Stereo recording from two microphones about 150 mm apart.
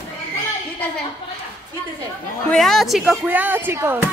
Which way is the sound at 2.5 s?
Centre (ahead or behind).